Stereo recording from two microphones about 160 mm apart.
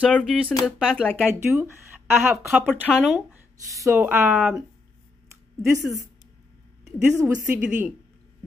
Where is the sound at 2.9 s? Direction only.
Centre (ahead or behind).